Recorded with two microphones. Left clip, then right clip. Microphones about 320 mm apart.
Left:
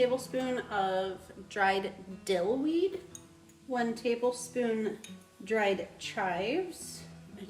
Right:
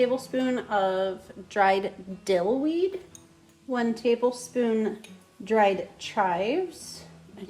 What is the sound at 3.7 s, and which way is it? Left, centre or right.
Speech, right.